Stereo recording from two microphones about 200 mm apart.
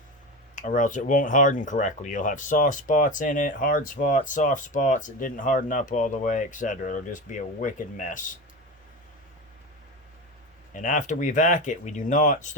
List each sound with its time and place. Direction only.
0.5 s speech: 40° left (ahead or behind)
10.8 s speech: 40° left (ahead or behind)